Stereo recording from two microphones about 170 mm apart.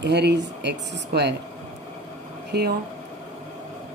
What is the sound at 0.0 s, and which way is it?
Speech, 80° right.